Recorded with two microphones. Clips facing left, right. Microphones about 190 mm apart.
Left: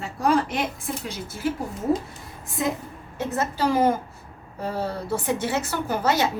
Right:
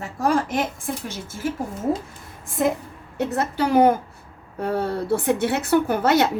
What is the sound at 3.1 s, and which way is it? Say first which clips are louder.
A woman's voice: right 3 dB; 65° right (ahead or behind).